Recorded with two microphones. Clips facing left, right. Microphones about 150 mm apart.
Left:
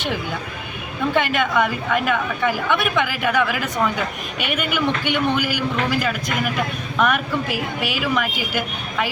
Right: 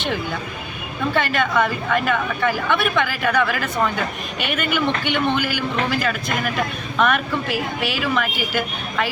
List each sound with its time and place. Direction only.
1.1 s speech: 15° left (ahead or behind)